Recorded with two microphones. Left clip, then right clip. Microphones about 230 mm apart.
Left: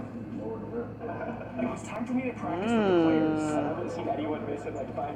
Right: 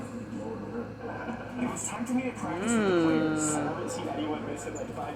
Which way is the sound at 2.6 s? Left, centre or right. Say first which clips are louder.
Left 1 dB; centre.